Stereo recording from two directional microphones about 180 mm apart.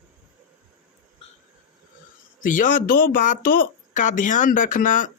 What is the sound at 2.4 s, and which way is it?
Speech, 50° left (ahead or behind).